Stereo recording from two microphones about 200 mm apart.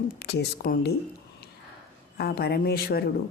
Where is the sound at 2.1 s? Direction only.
50° left (ahead or behind).